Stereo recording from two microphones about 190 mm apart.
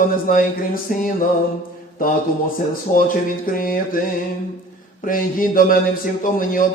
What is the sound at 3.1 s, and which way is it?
Speech, 45° left (ahead or behind).